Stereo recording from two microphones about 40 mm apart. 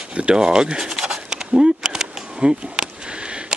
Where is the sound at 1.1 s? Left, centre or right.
Centre.